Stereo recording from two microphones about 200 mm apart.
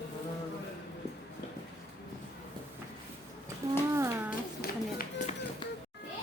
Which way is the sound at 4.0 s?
15° right (ahead or behind).